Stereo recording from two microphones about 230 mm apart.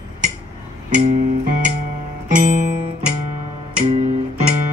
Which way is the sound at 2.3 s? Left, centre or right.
Right.